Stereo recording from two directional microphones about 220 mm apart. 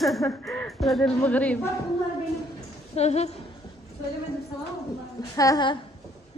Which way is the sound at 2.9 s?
30° left (ahead or behind).